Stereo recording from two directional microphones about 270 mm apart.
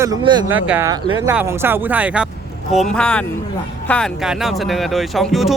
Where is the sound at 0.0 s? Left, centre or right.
Centre.